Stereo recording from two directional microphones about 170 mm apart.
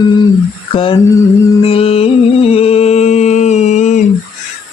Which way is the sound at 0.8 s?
30° left (ahead or behind).